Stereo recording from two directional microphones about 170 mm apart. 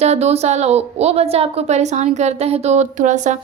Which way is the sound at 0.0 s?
40° right (ahead or behind).